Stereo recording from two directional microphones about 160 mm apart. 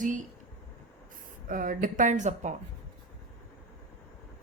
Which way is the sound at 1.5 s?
55° right (ahead or behind).